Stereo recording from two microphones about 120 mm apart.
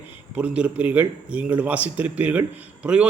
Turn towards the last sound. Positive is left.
turn(degrees=-10)  # may be behind; listen again after turning